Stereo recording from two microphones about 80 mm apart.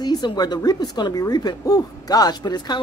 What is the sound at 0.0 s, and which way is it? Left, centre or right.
A man's voice, left.